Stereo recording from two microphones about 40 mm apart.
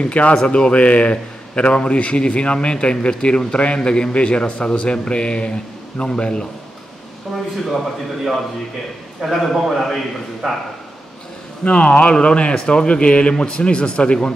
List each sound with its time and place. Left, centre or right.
0.0 s a man's voice: left
9.2 s a man's voice: centre
11.6 s a man's voice: left